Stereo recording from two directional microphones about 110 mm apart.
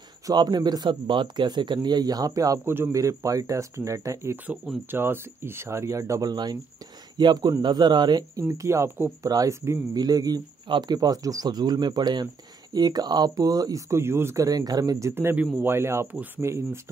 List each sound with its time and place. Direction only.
0.3 s speech: 40° right (ahead or behind)
8.5 s speech: 25° right (ahead or behind)